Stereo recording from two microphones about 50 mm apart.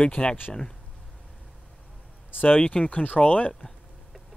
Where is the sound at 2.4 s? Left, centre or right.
Left.